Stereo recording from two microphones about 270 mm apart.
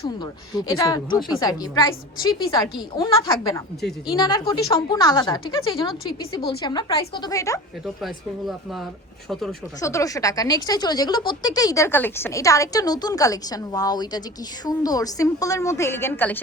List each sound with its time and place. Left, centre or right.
0.5 s speech: centre
9.3 s speech: centre